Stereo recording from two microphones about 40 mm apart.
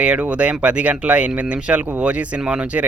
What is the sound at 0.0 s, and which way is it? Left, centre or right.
Speech, right.